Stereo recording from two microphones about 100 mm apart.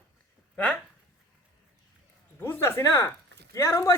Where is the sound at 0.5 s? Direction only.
10° left (ahead or behind).